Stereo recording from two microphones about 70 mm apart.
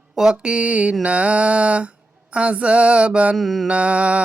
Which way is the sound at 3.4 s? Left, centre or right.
Centre.